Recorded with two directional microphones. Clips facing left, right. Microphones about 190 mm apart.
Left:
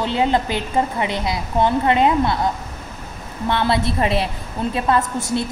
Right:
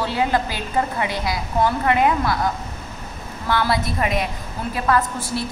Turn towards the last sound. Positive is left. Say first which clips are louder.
# left 1 dB
turn(degrees=25)  # may be behind; listen again after turning